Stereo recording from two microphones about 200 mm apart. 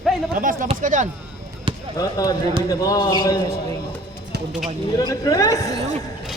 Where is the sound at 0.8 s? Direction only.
40° right (ahead or behind).